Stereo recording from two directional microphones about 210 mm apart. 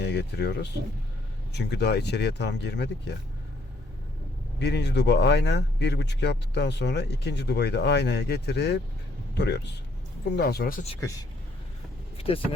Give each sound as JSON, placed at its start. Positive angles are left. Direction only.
{"t": 0.0, "sound": "speech", "side_deg": 55}
{"t": 4.6, "sound": "speech", "side_deg": 55}
{"t": 11.0, "sound": "speech", "side_deg": 15}
{"t": 12.1, "sound": "speech", "side_deg": 25}